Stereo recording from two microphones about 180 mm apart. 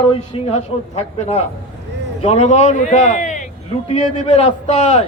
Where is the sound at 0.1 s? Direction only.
35° left (ahead or behind).